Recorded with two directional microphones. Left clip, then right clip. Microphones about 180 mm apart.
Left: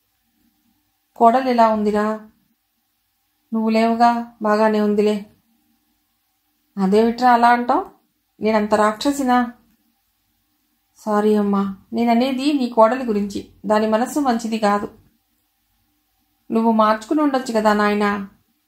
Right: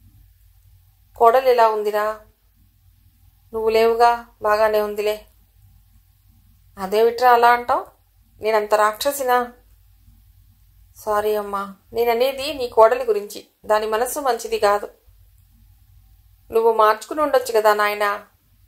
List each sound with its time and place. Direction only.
1.1 s speech: 35° right (ahead or behind)
3.5 s speech: 35° right (ahead or behind)
6.7 s speech: 35° right (ahead or behind)
11.0 s speech: 35° right (ahead or behind)
16.4 s speech: 35° right (ahead or behind)